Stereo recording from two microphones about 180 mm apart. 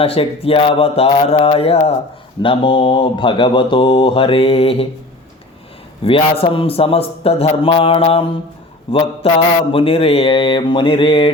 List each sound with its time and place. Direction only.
0.0 s a man's voice: 30° left (ahead or behind)
2.4 s mantra: 30° left (ahead or behind)
6.1 s a man's voice: 30° left (ahead or behind)
9.7 s mantra: 30° left (ahead or behind)